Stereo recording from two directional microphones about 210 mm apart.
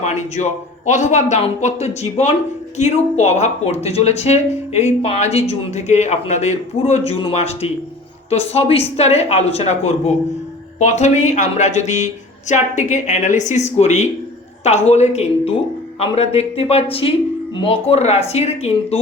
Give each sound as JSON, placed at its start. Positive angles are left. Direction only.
{"t": 0.3, "sound": "speech", "side_deg": 35}